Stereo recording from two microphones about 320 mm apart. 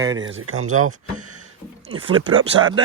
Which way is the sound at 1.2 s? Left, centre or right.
Right.